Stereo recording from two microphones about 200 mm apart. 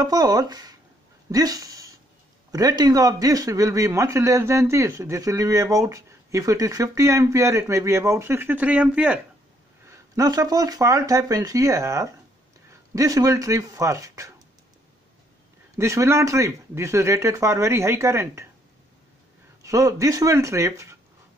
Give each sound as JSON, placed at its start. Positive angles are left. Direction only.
{"t": 0.0, "sound": "a man's voice", "side_deg": -20}
{"t": 9.8, "sound": "a man's voice", "side_deg": -20}
{"t": 15.7, "sound": "a man's voice", "side_deg": -15}
{"t": 19.6, "sound": "a man's voice", "side_deg": -15}